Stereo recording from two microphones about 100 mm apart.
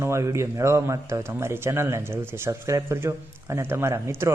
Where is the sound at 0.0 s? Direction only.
30° right (ahead or behind).